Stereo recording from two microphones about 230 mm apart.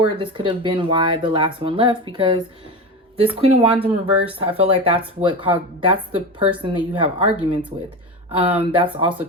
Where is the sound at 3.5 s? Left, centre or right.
Right.